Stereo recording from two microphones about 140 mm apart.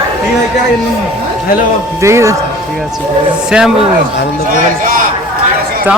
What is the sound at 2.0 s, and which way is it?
Speech, 20° right (ahead or behind).